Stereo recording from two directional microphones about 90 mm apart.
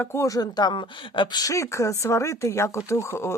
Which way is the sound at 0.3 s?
45° left (ahead or behind).